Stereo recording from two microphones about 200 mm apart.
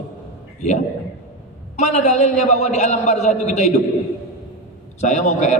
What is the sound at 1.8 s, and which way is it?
A man's voice, 35° left (ahead or behind).